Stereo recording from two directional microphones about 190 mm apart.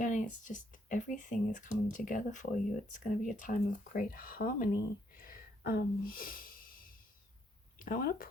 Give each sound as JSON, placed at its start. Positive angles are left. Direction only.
{"t": 0.0, "sound": "speech", "side_deg": 40}
{"t": 5.1, "sound": "a sound", "side_deg": 50}
{"t": 7.9, "sound": "speech", "side_deg": 50}